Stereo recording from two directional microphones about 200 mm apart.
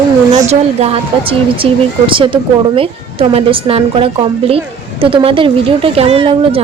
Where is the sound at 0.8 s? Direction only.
30° right (ahead or behind).